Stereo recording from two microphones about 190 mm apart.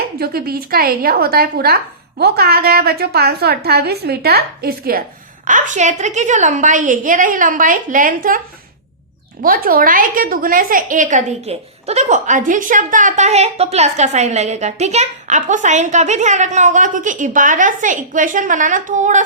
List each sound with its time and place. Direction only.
0.2 s a woman's voice: 55° right (ahead or behind)
5.5 s a woman's voice: 40° right (ahead or behind)
9.4 s a woman's voice: 50° right (ahead or behind)